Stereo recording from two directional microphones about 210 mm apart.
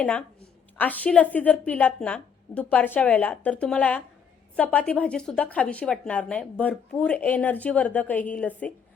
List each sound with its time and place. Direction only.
0.0 s a woman's voice: 5° left (ahead or behind)